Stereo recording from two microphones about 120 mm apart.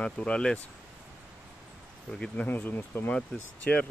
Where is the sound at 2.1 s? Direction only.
10° left (ahead or behind).